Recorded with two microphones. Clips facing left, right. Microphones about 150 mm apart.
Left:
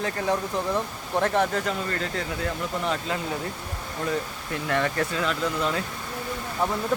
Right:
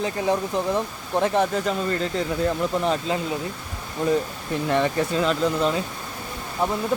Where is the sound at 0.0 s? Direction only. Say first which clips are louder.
Right 3 dB; 20° right (ahead or behind).